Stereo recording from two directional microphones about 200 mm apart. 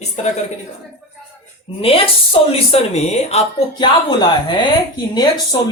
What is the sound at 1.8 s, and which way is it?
Speech, 30° left (ahead or behind).